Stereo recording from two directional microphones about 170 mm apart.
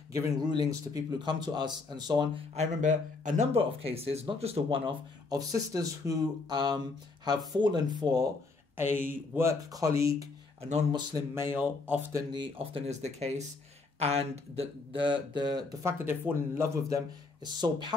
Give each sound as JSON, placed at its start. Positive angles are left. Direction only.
{"t": 0.1, "sound": "a man's voice", "side_deg": -25}
{"t": 2.5, "sound": "speech", "side_deg": -45}
{"t": 5.5, "sound": "a man's voice", "side_deg": -20}
{"t": 8.7, "sound": "speech", "side_deg": -15}
{"t": 12.3, "sound": "speech", "side_deg": -30}
{"t": 16.1, "sound": "a man's voice", "side_deg": -15}